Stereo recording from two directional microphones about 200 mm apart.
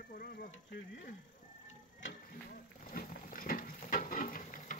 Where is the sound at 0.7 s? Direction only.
50° left (ahead or behind).